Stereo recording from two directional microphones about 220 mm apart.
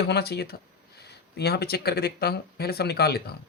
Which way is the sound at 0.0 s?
50° left (ahead or behind).